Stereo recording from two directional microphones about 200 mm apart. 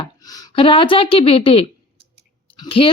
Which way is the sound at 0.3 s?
20° left (ahead or behind).